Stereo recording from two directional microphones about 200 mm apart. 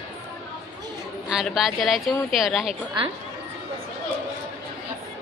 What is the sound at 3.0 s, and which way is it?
Speech, 25° right (ahead or behind).